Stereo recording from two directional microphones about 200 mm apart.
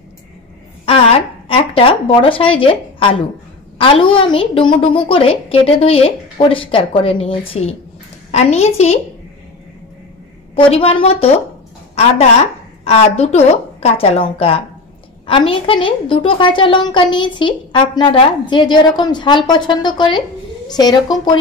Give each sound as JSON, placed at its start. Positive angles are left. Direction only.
{"t": 0.8, "sound": "a sound", "side_deg": 30}
{"t": 1.8, "sound": "a woman's voice", "side_deg": 25}
{"t": 10.5, "sound": "a woman's voice", "side_deg": 30}
{"t": 13.2, "sound": "a woman's voice", "side_deg": 30}